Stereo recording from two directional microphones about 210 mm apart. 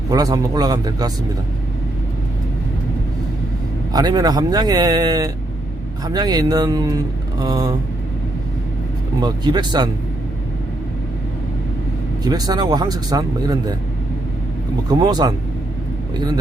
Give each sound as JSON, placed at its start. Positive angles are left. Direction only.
{"t": 0.1, "sound": "speech", "side_deg": -15}
{"t": 3.9, "sound": "speech", "side_deg": -20}
{"t": 9.2, "sound": "speech", "side_deg": -20}
{"t": 12.2, "sound": "speech", "side_deg": -20}
{"t": 14.8, "sound": "speech", "side_deg": -20}